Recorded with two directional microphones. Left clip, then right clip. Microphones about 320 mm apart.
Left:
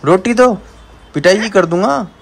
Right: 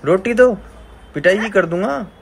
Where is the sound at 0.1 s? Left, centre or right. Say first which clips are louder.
Left 2 dB; left.